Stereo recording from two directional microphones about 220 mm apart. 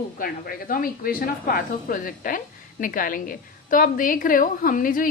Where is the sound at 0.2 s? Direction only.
40° left (ahead or behind).